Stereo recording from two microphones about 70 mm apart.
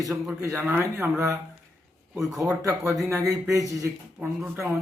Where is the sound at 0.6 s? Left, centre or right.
Right.